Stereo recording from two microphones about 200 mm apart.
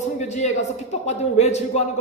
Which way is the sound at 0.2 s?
35° left (ahead or behind).